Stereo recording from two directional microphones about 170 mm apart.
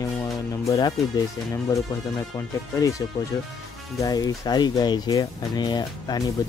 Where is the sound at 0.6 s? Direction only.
25° left (ahead or behind).